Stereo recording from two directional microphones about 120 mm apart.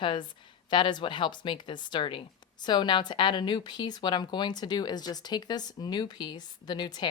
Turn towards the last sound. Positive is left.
turn(degrees=35)  # may be behind; listen again after turning